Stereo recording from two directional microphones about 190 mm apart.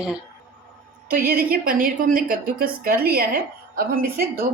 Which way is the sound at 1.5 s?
50° right (ahead or behind).